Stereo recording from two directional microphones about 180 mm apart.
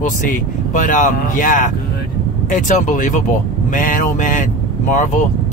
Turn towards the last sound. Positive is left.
turn(degrees=45)  # may be behind; listen again after turning